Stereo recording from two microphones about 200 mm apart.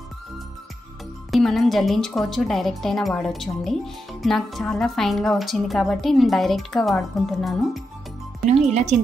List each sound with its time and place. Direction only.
1.3 s speech: centre (ahead or behind)
8.5 s speech: 35° right (ahead or behind)